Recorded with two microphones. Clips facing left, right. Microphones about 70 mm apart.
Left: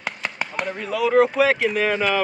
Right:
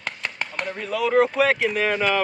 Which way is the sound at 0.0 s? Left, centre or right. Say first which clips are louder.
Left 2 dB; centre.